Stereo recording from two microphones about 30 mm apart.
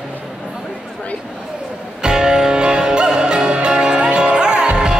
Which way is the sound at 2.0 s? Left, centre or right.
Right.